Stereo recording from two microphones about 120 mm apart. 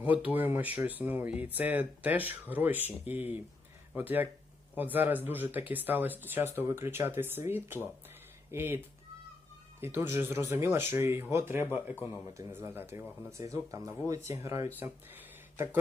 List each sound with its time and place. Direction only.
0.0 s speech: 15° right (ahead or behind)
9.8 s speech: 20° right (ahead or behind)
14.8 s speech: 15° right (ahead or behind)